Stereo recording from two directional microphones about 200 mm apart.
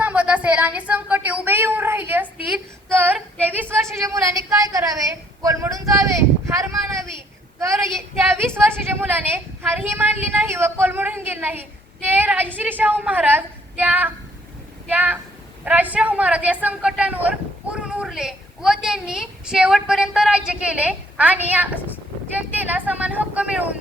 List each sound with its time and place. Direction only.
0.0 s a woman's voice: 5° right (ahead or behind)
8.3 s a woman's voice: 10° right (ahead or behind)